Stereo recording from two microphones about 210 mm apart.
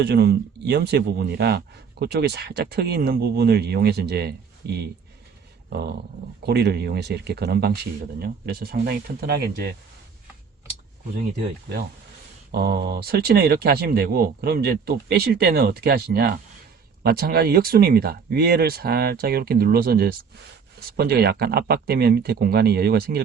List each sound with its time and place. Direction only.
0.0 s speech: 50° right (ahead or behind)
11.7 s speech: 55° right (ahead or behind)